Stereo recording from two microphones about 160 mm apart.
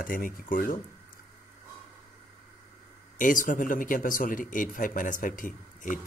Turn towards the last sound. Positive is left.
turn(degrees=55)  # may be behind; listen again after turning